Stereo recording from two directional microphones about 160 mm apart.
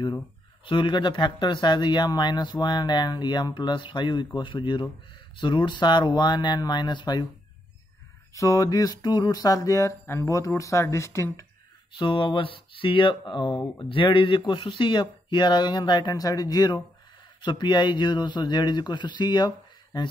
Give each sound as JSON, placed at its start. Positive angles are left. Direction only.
{"t": 0.7, "sound": "speech", "side_deg": 30}
{"t": 8.4, "sound": "speech", "side_deg": 20}
{"t": 11.9, "sound": "speech", "side_deg": 30}